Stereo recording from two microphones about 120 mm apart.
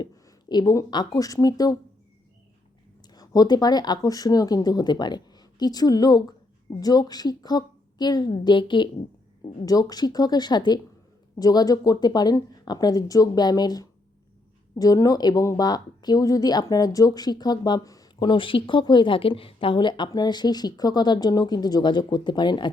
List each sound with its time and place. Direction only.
0.0 s speech: 35° left (ahead or behind)
3.1 s speech: 35° left (ahead or behind)
9.6 s speech: 30° left (ahead or behind)
18.2 s speech: 45° left (ahead or behind)